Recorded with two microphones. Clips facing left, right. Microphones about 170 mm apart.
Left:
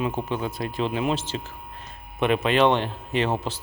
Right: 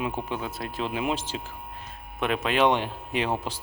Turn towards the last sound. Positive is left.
turn(degrees=-10)  # may be behind; listen again after turning